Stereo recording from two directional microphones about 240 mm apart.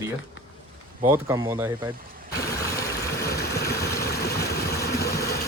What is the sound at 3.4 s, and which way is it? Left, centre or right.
Vehicle, left.